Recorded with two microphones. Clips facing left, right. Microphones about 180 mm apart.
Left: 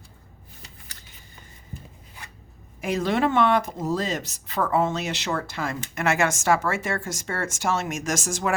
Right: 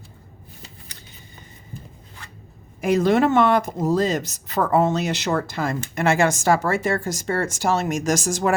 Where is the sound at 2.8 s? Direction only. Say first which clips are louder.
Right 6 dB; 45° right (ahead or behind).